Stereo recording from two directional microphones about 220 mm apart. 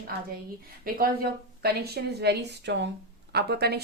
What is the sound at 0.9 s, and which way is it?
A woman's voice, 45° right (ahead or behind).